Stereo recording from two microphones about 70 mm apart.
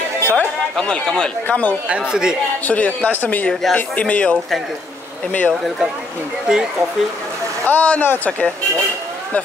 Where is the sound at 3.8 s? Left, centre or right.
Centre.